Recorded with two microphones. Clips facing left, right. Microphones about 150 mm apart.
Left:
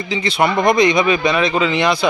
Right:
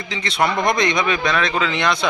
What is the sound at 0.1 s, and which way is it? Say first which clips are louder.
Speech: left 3 dB; 5° left (ahead or behind).